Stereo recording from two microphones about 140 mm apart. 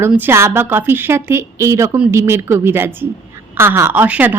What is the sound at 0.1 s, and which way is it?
A woman's voice, 15° right (ahead or behind).